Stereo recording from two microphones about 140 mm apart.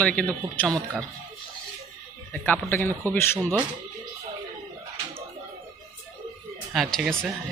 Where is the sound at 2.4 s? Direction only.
15° left (ahead or behind).